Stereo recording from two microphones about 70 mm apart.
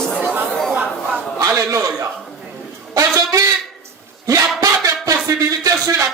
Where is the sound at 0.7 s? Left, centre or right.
Centre.